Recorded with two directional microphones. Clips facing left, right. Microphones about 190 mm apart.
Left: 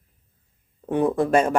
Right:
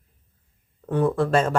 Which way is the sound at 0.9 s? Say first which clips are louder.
Left 1 dB; 20° left (ahead or behind).